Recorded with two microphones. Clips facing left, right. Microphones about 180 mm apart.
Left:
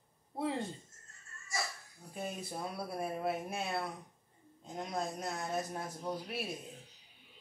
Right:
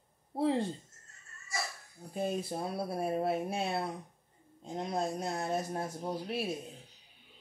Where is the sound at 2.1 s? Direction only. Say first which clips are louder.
Right 7 dB; 30° right (ahead or behind).